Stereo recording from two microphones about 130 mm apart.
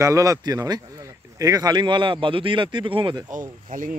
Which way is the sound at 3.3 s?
90° right.